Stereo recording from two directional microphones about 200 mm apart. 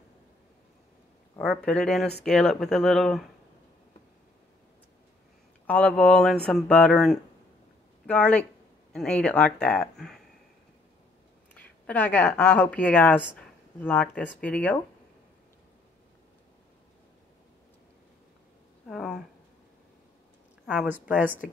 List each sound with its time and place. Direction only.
1.4 s speech: 5° left (ahead or behind)
5.7 s speech: 5° left (ahead or behind)
11.5 s a woman's voice: 5° left (ahead or behind)
18.9 s a sound: centre (ahead or behind)
20.6 s speech: 5° right (ahead or behind)